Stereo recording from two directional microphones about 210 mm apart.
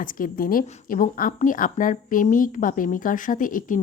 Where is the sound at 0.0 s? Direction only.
40° left (ahead or behind).